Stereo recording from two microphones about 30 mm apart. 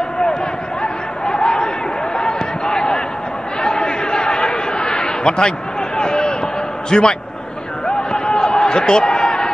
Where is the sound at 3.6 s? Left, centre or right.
Left.